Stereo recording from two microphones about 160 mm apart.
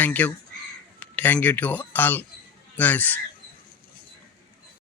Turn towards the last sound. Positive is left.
turn(degrees=10)  # may be behind; listen again after turning